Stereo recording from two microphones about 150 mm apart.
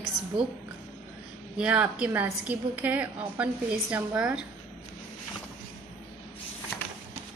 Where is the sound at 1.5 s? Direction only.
10° right (ahead or behind).